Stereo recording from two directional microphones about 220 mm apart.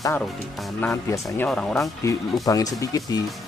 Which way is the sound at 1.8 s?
15° left (ahead or behind).